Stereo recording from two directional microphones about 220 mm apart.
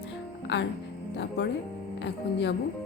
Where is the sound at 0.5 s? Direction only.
50° left (ahead or behind).